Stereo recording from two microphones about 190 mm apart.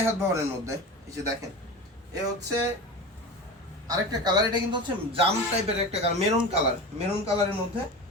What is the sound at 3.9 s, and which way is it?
Speech, 20° right (ahead or behind).